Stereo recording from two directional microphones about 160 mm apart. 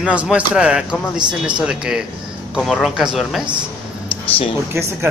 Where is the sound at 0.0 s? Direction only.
5° right (ahead or behind).